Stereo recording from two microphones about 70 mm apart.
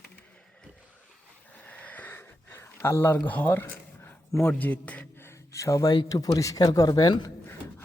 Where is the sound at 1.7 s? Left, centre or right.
Left.